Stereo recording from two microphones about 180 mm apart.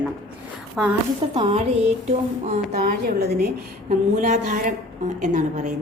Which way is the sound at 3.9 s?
45° right (ahead or behind).